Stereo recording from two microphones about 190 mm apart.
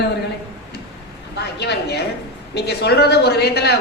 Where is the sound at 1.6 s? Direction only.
60° left (ahead or behind).